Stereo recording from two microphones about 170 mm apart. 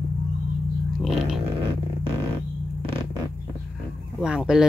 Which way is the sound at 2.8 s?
30° right (ahead or behind).